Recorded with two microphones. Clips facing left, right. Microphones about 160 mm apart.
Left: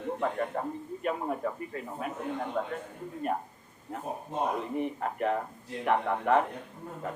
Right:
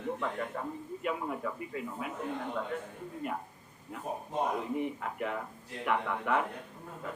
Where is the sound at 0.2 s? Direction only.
45° left (ahead or behind).